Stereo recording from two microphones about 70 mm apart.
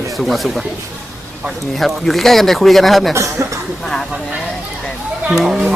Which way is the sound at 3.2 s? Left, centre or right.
Right.